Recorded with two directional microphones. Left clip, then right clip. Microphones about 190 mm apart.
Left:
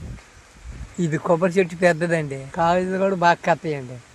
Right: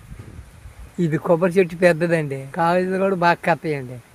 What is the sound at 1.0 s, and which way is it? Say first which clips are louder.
Speech: right 2 dB; 25° right (ahead or behind).